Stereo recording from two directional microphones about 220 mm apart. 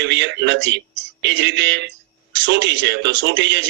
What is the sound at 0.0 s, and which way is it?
A man's voice, 50° right (ahead or behind).